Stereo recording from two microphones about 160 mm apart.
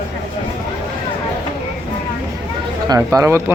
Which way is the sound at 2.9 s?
20° right (ahead or behind).